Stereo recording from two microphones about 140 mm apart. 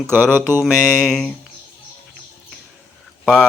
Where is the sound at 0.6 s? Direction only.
Centre (ahead or behind).